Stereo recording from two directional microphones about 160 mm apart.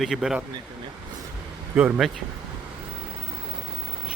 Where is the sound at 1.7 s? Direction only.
5° right (ahead or behind).